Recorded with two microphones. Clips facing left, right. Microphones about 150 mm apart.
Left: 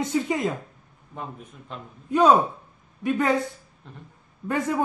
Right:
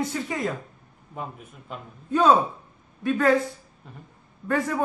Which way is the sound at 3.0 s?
20° left (ahead or behind).